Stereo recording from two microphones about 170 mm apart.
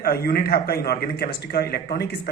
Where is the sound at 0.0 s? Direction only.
65° left (ahead or behind).